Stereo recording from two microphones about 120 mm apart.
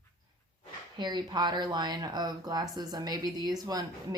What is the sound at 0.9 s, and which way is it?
Speech, 35° right (ahead or behind).